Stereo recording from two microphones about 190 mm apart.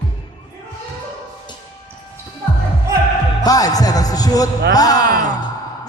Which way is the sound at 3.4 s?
20° left (ahead or behind).